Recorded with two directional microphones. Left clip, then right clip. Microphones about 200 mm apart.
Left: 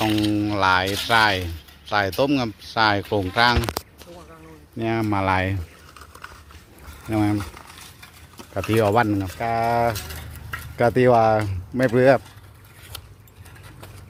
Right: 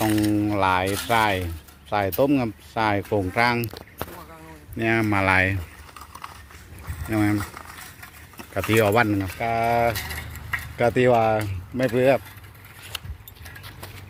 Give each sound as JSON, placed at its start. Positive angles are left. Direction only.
{"t": 0.0, "sound": "music", "side_deg": 5}
{"t": 1.0, "sound": "speech", "side_deg": 0}
{"t": 3.8, "sound": "a sound", "side_deg": 50}
{"t": 4.8, "sound": "speech", "side_deg": 5}
{"t": 7.1, "sound": "speech", "side_deg": 10}
{"t": 8.7, "sound": "speech", "side_deg": 15}
{"t": 9.9, "sound": "vehicle", "side_deg": -35}
{"t": 10.8, "sound": "speech", "side_deg": 20}